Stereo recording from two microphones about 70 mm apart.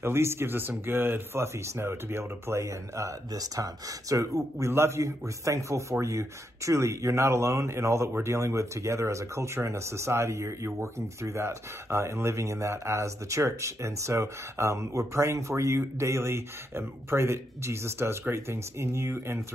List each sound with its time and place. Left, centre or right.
0.0 s speech: right